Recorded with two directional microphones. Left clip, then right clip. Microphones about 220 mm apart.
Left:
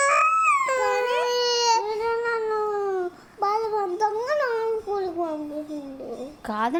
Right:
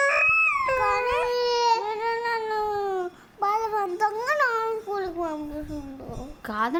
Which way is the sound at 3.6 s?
25° right (ahead or behind).